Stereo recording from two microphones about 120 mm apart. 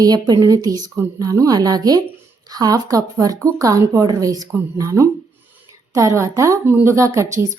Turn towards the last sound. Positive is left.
turn(degrees=-25)  # may be behind; listen again after turning